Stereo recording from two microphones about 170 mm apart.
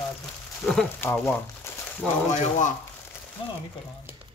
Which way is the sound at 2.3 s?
45° left (ahead or behind).